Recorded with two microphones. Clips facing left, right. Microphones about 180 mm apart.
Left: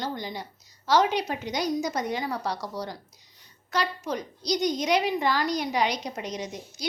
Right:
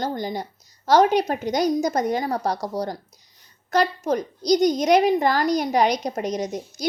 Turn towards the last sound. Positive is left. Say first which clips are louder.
# right 8 dB
turn(degrees=-45)  # may be behind; listen again after turning